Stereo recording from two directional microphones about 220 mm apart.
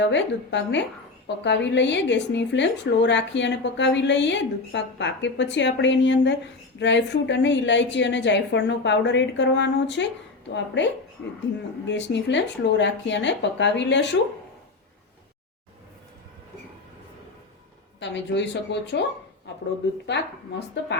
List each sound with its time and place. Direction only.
0.0 s a woman's voice: 55° left (ahead or behind)
18.0 s a woman's voice: 55° left (ahead or behind)
20.1 s a woman's voice: 50° left (ahead or behind)